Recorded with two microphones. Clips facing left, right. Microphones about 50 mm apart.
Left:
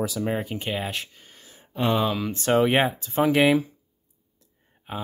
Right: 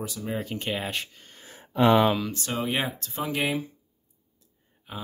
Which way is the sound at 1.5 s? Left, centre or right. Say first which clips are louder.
Right 4 dB; right.